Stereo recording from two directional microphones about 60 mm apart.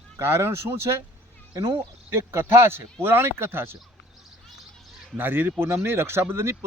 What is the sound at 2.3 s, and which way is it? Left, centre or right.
Speech, right.